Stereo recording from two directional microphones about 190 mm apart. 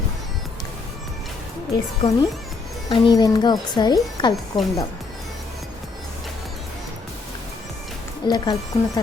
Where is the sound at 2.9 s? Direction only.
20° left (ahead or behind).